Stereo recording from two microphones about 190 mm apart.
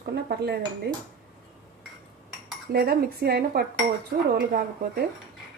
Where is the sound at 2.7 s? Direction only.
55° right (ahead or behind).